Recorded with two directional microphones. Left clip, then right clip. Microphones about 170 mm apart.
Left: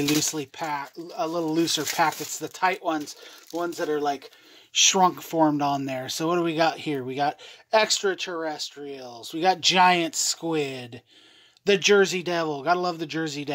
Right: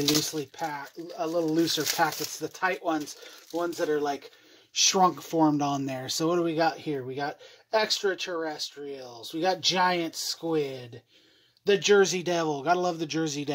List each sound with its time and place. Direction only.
0.2 s speech: 25° left (ahead or behind); by 6.4 s 5° left (ahead or behind)
6.4 s speech: 25° left (ahead or behind)
11.8 s speech: 10° left (ahead or behind)